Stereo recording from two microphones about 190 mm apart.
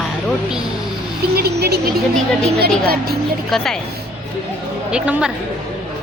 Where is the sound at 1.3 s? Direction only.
55° right (ahead or behind).